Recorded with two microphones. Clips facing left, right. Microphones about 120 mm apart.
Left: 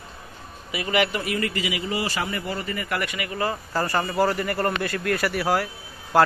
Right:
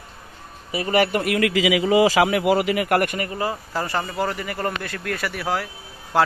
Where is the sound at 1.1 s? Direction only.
65° right (ahead or behind).